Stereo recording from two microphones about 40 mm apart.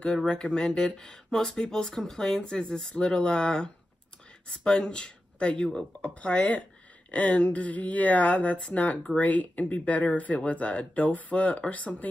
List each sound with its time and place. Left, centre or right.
0.3 s speech: centre
2.5 s speech: centre; by 12.1 s left